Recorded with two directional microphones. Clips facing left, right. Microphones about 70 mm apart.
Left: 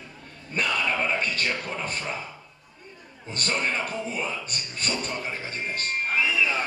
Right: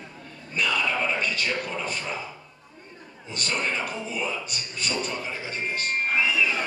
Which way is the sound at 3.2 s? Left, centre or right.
Left.